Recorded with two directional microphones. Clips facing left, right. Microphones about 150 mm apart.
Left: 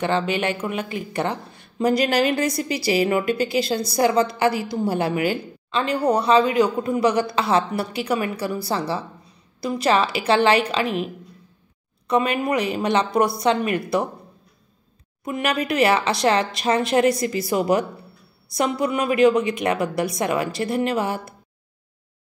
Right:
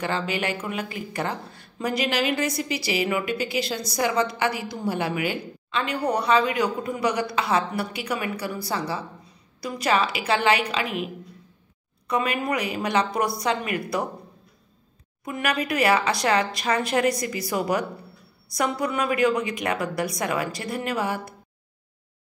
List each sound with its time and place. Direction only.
0.0 s speech: 25° left (ahead or behind)
2.0 s a woman's voice: 40° left (ahead or behind)
12.1 s speech: 25° left (ahead or behind)
15.2 s speech: 25° left (ahead or behind)